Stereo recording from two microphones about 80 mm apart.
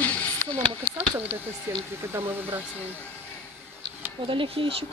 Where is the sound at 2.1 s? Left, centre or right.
Right.